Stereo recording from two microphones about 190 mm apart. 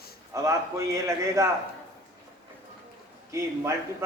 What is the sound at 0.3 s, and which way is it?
A man's voice, 15° right (ahead or behind).